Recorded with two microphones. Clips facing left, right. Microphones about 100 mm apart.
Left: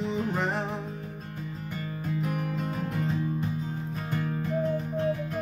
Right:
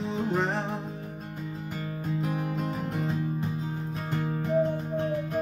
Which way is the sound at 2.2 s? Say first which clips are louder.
Right 1 dB; 20° right (ahead or behind).